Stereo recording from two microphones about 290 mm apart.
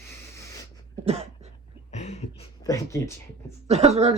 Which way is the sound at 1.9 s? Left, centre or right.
Left.